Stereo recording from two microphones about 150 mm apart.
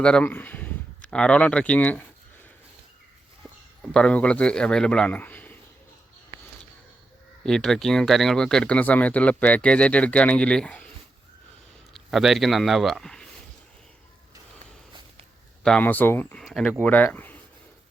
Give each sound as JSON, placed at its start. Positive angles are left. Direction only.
{"t": 0.0, "sound": "speech", "side_deg": 5}
{"t": 3.9, "sound": "speech", "side_deg": 5}
{"t": 7.4, "sound": "speech", "side_deg": 5}
{"t": 11.9, "sound": "a man's voice", "side_deg": 0}
{"t": 15.6, "sound": "speech", "side_deg": 10}
{"t": 16.4, "sound": "speech", "side_deg": 0}
{"t": 16.8, "sound": "speech", "side_deg": 10}